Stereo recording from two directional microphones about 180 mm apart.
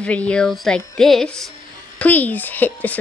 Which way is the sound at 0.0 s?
5° left (ahead or behind).